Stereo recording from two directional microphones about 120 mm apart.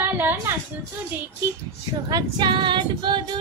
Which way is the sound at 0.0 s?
20° right (ahead or behind).